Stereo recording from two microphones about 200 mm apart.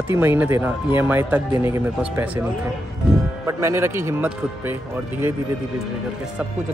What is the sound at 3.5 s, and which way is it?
Speech, 15° right (ahead or behind).